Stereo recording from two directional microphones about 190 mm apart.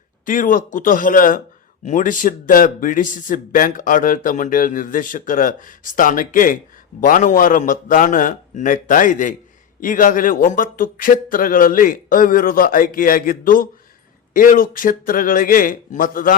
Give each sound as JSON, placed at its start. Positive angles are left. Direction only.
{"t": 0.3, "sound": "speech", "side_deg": 45}